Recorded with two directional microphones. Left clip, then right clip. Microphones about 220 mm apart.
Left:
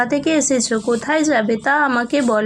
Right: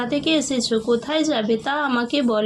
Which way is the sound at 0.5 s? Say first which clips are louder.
Left 2 dB; 35° left (ahead or behind).